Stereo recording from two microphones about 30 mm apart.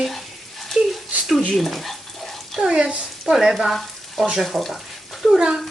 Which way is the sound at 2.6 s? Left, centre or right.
Right.